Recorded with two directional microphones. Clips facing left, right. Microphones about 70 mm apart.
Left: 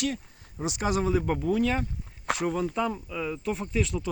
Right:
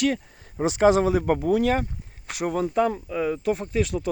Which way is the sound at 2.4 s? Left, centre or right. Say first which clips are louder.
Right 7 dB; right.